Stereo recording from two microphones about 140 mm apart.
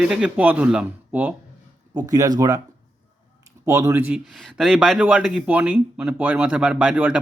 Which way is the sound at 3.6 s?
20° right (ahead or behind).